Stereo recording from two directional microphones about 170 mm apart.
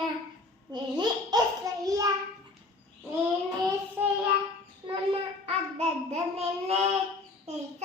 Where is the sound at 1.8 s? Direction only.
20° right (ahead or behind).